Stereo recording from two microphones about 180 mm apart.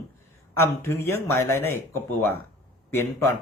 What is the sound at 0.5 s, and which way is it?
Speech, 15° left (ahead or behind).